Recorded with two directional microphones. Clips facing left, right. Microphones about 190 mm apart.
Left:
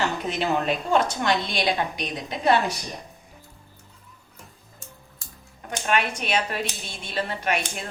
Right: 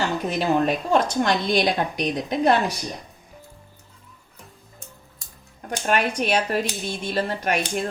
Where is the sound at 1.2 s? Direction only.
45° right (ahead or behind).